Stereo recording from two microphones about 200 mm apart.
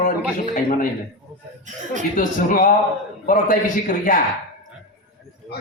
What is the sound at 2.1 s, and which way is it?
A man's voice, 40° left (ahead or behind).